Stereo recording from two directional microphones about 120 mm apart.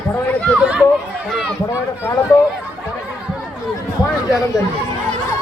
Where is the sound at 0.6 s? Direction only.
10° right (ahead or behind).